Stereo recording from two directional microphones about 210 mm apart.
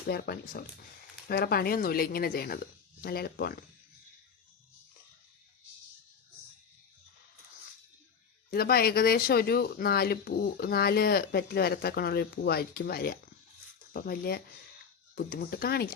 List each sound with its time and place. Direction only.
0.1 s speech: 45° left (ahead or behind)
8.4 s speech: 45° left (ahead or behind)